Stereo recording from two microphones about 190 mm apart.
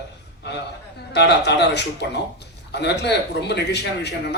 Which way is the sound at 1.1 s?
60° left (ahead or behind).